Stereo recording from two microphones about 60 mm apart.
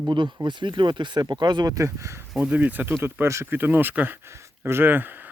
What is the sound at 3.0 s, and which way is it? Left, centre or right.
Speech, right.